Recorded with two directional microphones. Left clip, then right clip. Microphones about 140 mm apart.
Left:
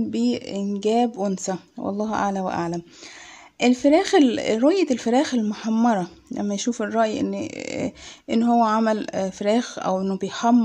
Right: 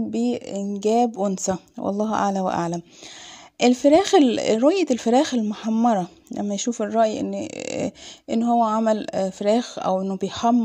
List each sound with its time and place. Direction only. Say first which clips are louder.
0.1 s speech: even; 30° right (ahead or behind)
5.4 s speech: right 1 dB; 30° right (ahead or behind)
8.4 s speech: left 1 dB; 25° right (ahead or behind)
8.8 s speech: right 1 dB; 35° right (ahead or behind)